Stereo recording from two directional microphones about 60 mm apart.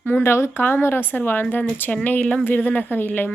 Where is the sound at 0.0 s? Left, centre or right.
Left.